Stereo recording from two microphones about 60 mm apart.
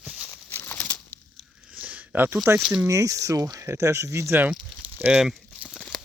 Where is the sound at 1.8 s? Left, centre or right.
Right.